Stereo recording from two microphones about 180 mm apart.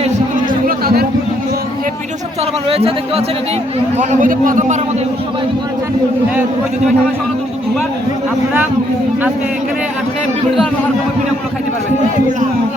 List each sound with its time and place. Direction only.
2.6 s speech: 30° right (ahead or behind)
3.9 s a man's voice: 45° right (ahead or behind)